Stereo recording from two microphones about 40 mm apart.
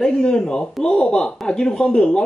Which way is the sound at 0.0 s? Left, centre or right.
Centre.